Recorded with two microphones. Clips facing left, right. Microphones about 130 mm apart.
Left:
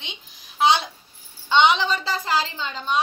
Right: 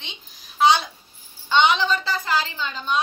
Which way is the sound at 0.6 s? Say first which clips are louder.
Right 1 dB; 20° left (ahead or behind).